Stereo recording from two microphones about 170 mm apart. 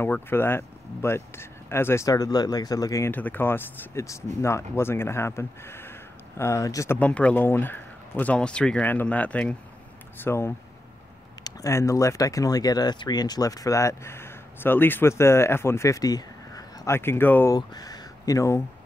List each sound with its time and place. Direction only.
0.0 s speech: 15° left (ahead or behind)
17.6 s speech: 25° left (ahead or behind)